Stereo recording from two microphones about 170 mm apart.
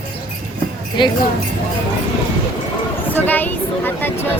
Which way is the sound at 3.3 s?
10° left (ahead or behind).